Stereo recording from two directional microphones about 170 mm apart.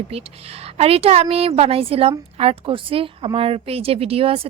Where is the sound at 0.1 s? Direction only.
35° right (ahead or behind).